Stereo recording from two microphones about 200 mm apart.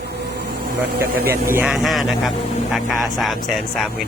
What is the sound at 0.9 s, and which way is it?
Speech, 50° right (ahead or behind).